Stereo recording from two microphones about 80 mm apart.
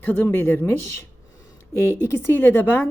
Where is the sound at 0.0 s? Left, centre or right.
Left.